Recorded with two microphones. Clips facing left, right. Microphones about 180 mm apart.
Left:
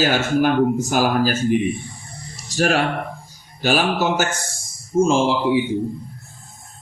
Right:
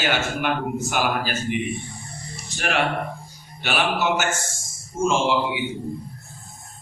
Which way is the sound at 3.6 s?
40° left (ahead or behind).